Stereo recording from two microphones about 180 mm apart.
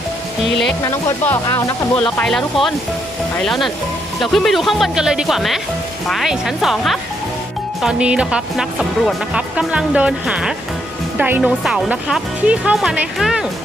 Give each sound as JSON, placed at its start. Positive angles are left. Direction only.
{"t": 0.9, "sound": "speech", "side_deg": 15}
{"t": 2.0, "sound": "speech", "side_deg": 5}